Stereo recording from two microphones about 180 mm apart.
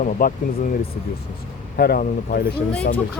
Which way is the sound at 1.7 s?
55° left (ahead or behind).